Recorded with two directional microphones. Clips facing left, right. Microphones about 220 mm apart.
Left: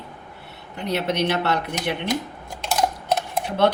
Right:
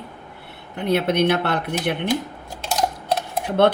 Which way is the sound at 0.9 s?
55° right (ahead or behind).